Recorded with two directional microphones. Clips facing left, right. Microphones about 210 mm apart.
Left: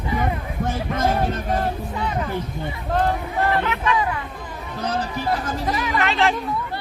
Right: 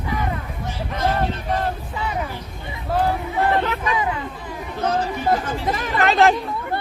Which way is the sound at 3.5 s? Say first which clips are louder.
Right 2 dB; 35° right (ahead or behind).